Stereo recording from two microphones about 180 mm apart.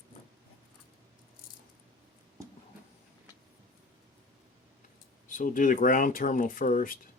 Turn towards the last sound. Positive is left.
turn(degrees=50)  # may be behind; listen again after turning